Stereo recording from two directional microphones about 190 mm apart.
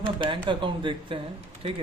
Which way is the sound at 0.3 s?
25° right (ahead or behind).